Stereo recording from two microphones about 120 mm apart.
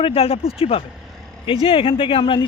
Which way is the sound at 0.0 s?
55° left (ahead or behind).